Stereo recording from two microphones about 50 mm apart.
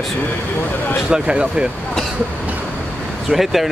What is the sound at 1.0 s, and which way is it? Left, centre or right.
Speech, centre.